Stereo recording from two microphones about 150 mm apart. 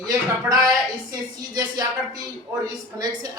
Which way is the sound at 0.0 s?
25° right (ahead or behind).